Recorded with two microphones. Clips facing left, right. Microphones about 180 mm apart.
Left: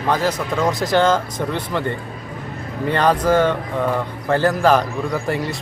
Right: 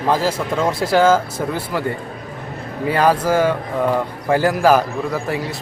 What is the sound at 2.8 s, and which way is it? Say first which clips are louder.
Speech: right 1 dB; 5° right (ahead or behind).